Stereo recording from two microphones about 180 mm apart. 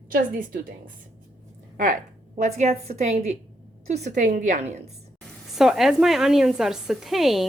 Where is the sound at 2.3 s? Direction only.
40° right (ahead or behind).